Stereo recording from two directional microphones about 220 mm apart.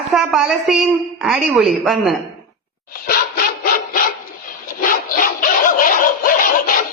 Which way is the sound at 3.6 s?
40° left (ahead or behind).